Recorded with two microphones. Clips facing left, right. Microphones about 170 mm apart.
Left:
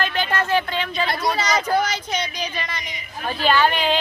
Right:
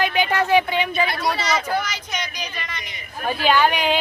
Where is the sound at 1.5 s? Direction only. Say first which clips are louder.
Left 3 dB; 35° left (ahead or behind).